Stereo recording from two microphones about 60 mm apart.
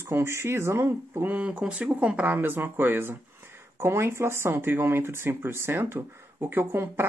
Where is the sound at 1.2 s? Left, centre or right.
Right.